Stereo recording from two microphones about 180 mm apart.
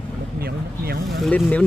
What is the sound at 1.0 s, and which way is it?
Speech, centre (ahead or behind).